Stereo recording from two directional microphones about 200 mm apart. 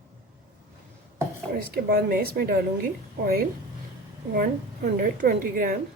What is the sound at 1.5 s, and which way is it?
A woman's voice, 45° right (ahead or behind).